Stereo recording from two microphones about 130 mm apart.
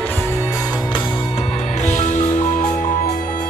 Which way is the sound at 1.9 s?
65° left (ahead or behind).